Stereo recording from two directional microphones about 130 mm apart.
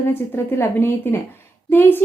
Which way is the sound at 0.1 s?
20° left (ahead or behind).